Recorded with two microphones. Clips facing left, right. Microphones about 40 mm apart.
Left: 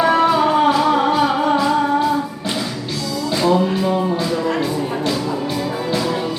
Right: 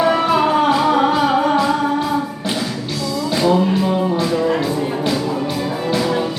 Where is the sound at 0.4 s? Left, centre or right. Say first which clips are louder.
Even; centre.